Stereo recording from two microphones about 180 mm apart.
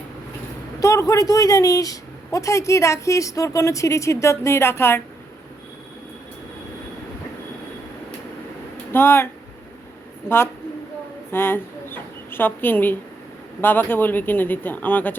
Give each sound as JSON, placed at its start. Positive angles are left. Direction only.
{"t": 0.8, "sound": "a woman's voice", "side_deg": 15}
{"t": 8.9, "sound": "a woman's voice", "side_deg": 10}